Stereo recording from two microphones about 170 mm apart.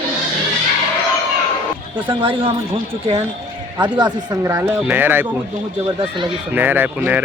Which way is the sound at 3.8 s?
25° right (ahead or behind).